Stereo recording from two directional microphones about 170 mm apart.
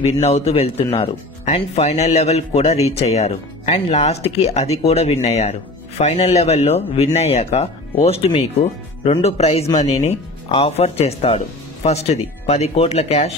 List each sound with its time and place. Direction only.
0.0 s speech: 35° left (ahead or behind)